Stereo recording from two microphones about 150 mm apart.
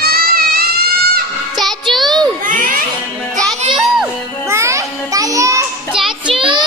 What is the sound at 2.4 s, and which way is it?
Crowd, 65° right (ahead or behind).